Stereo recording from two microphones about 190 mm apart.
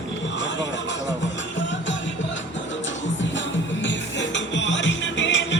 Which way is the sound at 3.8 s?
75° left (ahead or behind).